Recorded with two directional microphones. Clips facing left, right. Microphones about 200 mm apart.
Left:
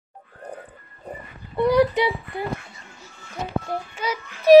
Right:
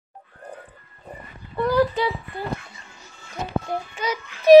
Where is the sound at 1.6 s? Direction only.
20° left (ahead or behind).